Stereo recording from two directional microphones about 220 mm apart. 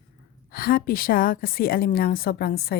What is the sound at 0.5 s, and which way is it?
A woman's voice, 40° left (ahead or behind).